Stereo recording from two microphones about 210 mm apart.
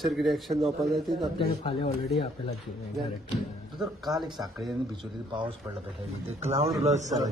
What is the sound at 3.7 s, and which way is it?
Speech, centre (ahead or behind).